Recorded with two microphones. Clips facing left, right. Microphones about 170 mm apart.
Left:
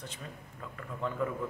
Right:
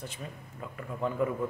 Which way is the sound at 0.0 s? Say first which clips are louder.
Right 3 dB; 10° right (ahead or behind).